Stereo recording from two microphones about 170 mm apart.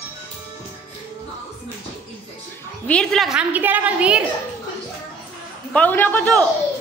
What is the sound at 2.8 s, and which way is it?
A woman's voice, 5° left (ahead or behind).